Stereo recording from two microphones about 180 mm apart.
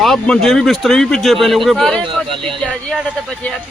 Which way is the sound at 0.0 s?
Centre (ahead or behind).